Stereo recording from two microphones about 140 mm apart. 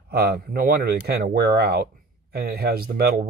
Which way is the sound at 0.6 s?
90° right.